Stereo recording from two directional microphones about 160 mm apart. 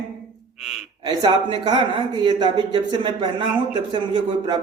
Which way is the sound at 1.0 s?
25° right (ahead or behind).